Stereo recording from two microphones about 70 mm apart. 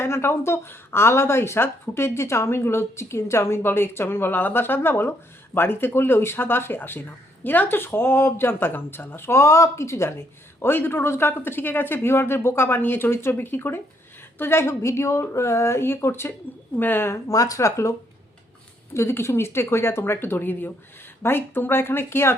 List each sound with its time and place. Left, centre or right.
0.0 s speech: left
17.2 s speech: left
18.9 s speech: left